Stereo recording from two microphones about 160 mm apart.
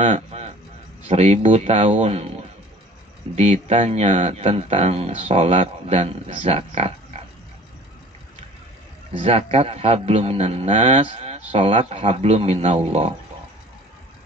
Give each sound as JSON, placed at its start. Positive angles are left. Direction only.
{"t": 0.0, "sound": "a sound", "side_deg": -45}
{"t": 1.0, "sound": "speech", "side_deg": -45}
{"t": 3.3, "sound": "a man's voice", "side_deg": -40}
{"t": 9.2, "sound": "a man's voice", "side_deg": -40}